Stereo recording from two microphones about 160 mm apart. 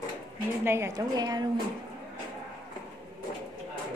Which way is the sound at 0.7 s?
15° right (ahead or behind).